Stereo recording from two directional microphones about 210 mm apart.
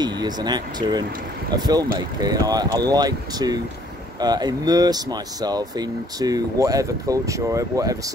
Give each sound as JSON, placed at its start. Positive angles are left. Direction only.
{"t": 0.0, "sound": "speech", "side_deg": -20}